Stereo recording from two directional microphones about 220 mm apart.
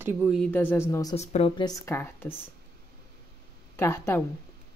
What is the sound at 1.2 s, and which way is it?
Speech, 30° left (ahead or behind).